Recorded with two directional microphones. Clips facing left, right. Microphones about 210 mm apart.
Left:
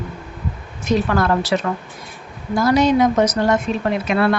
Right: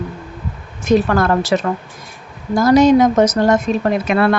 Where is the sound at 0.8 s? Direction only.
50° right (ahead or behind).